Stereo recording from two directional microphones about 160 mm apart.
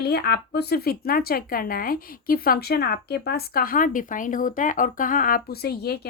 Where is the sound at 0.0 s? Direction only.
85° left.